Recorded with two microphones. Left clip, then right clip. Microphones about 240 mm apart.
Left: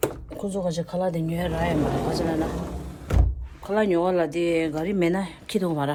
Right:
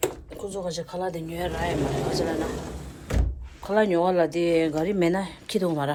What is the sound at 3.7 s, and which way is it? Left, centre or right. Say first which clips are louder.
Speech: right 1 dB; centre.